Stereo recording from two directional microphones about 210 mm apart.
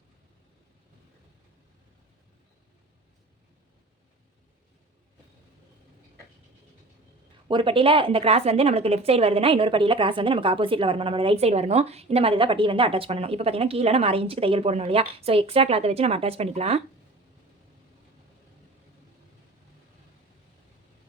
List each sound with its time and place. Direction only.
7.4 s a woman's voice: 25° right (ahead or behind)